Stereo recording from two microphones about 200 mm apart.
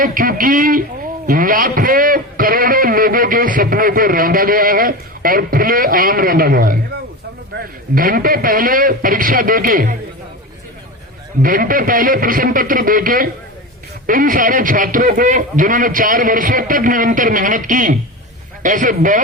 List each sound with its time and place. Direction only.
0.0 s a man's voice: 45° right (ahead or behind)
7.9 s a man's voice: 45° right (ahead or behind)
11.4 s a man's voice: 45° right (ahead or behind)